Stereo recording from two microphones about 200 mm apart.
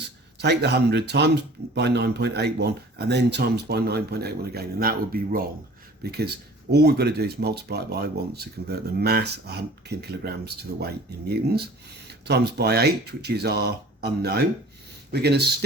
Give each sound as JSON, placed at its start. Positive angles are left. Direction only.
{"t": 0.3, "sound": "speech", "side_deg": -55}